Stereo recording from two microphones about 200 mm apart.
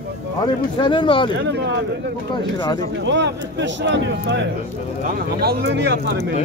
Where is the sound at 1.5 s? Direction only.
60° right (ahead or behind).